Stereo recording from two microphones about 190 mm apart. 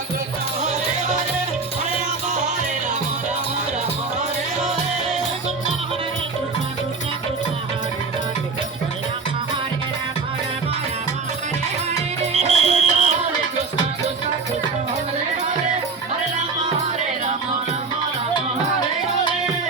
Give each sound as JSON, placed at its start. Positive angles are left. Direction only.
{"t": 12.3, "sound": "music", "side_deg": -35}